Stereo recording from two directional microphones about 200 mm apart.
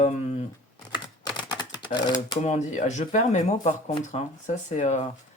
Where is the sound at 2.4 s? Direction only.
35° left (ahead or behind).